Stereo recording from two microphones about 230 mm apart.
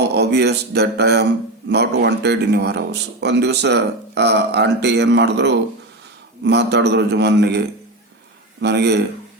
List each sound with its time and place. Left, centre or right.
0.1 s speech: right
8.6 s speech: right